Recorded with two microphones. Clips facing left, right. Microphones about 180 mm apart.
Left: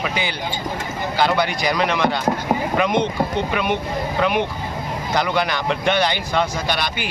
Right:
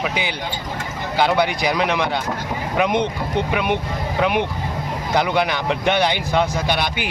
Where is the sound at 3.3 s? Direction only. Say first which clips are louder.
Right 1 dB; 15° right (ahead or behind).